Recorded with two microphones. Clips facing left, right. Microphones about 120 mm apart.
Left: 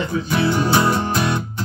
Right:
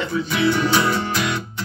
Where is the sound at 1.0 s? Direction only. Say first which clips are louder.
Left 3 dB; 35° left (ahead or behind).